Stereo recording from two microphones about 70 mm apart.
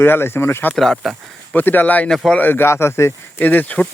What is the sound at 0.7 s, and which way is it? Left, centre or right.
Speech, centre.